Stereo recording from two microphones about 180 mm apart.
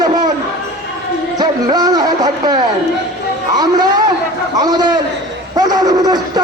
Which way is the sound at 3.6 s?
20° right (ahead or behind).